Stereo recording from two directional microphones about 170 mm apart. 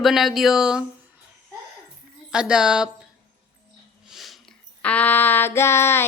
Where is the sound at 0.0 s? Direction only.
Centre (ahead or behind).